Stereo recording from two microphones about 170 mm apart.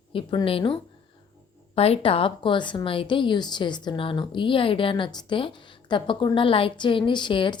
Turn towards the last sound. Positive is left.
turn(degrees=30)  # may be behind; listen again after turning